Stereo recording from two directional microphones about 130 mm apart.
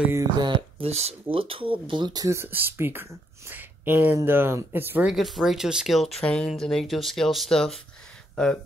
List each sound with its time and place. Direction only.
0.1 s speech: 30° right (ahead or behind); by 1.1 s 55° right (ahead or behind)
1.3 s speech: 45° right (ahead or behind); by 5.1 s 15° right (ahead or behind)
5.1 s speech: centre (ahead or behind)